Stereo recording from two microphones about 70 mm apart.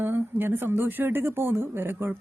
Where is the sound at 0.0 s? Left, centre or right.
Right.